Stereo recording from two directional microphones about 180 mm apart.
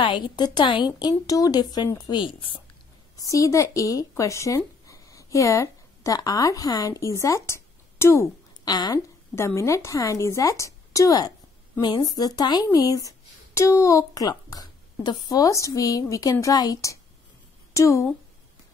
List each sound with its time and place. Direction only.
0.0 s a child's voice: 25° left (ahead or behind)